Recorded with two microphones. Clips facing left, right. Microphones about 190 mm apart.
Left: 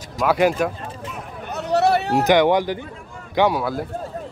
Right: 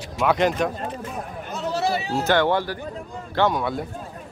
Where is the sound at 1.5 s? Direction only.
65° left (ahead or behind).